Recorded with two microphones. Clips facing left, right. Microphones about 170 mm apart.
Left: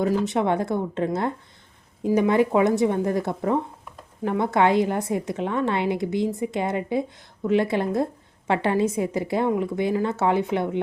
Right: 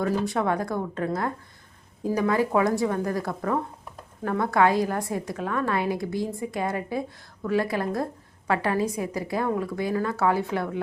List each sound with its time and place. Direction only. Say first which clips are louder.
0.0 s a woman's voice: left 3 dB; 20° left (ahead or behind)